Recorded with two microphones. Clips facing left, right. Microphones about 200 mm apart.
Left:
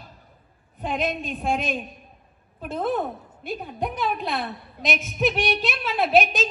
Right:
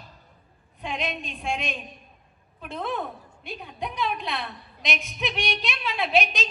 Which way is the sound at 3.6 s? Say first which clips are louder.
Left 2 dB; 50° left (ahead or behind).